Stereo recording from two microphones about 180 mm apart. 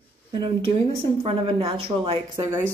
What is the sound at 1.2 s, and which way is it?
A woman's voice, 30° right (ahead or behind).